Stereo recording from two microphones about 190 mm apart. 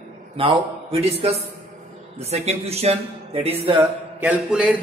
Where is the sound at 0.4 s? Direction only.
30° right (ahead or behind).